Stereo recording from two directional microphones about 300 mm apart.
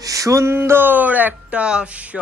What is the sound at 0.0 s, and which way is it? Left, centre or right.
Speech, centre.